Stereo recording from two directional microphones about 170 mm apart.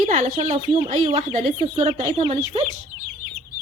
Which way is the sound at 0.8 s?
50° right (ahead or behind).